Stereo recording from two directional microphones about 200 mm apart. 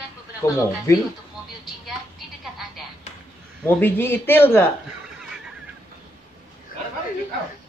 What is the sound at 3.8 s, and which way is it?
Speech, 10° left (ahead or behind).